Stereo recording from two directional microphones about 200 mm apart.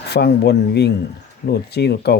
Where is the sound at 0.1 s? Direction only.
55° left (ahead or behind).